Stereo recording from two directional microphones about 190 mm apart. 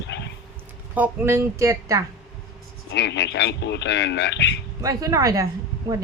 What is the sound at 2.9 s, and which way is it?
A man's voice, 65° left (ahead or behind).